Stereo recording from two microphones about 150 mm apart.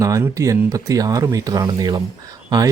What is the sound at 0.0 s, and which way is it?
Speech, 20° right (ahead or behind).